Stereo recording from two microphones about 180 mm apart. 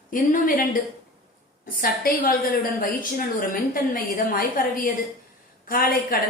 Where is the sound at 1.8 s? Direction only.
55° left (ahead or behind).